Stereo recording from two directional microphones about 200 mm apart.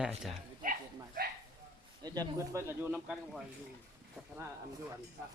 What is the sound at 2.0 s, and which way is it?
Speech, 15° right (ahead or behind).